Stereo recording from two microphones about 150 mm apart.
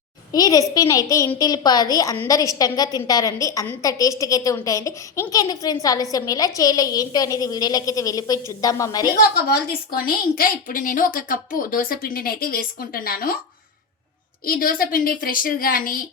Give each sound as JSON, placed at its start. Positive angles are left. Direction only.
{"t": 0.3, "sound": "a woman's voice", "side_deg": 25}
{"t": 9.1, "sound": "a woman's voice", "side_deg": 90}
{"t": 14.4, "sound": "a woman's voice", "side_deg": 75}